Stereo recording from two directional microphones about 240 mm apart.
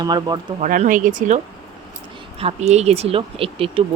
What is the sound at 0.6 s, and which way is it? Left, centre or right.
Speech, right.